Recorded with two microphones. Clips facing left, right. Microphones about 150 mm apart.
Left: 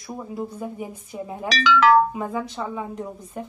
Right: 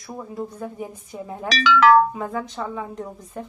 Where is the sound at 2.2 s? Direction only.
5° left (ahead or behind).